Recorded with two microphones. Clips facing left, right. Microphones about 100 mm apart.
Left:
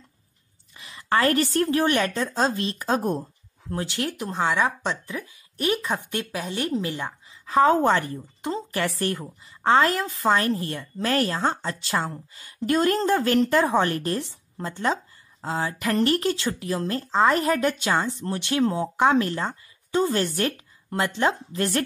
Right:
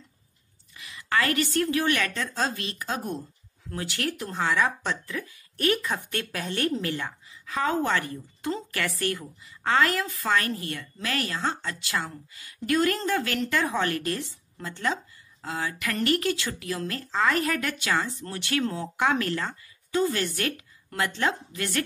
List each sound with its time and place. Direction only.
0.7 s a woman's voice: 30° left (ahead or behind)
3.7 s speech: 25° left (ahead or behind)
7.4 s a woman's voice: 35° left (ahead or behind)